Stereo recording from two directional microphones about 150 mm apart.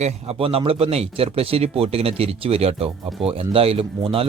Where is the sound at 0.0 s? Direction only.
40° right (ahead or behind).